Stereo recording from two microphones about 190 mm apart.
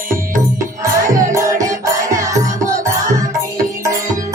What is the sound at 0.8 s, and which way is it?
Music, 15° right (ahead or behind).